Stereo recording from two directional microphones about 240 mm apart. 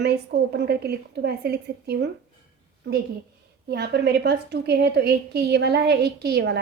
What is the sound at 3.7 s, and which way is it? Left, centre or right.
A woman's voice, right.